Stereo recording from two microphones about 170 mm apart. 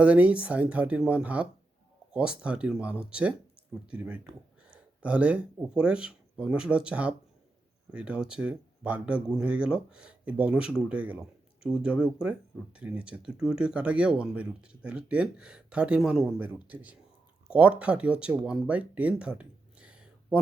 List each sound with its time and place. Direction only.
0.0 s speech: 5° right (ahead or behind)